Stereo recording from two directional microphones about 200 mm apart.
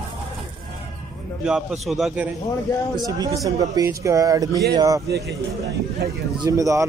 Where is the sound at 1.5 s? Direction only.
5° right (ahead or behind).